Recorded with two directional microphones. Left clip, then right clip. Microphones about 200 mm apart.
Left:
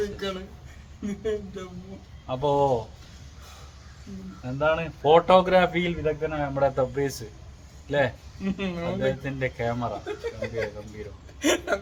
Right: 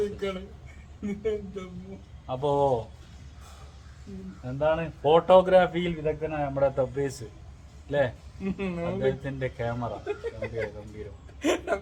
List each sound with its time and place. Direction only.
1.0 s speech: centre (ahead or behind)
2.2 s a man's voice: 10° left (ahead or behind)
4.4 s a man's voice: 5° left (ahead or behind)